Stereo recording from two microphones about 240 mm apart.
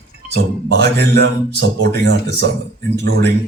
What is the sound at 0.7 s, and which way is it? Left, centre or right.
A man's voice, right.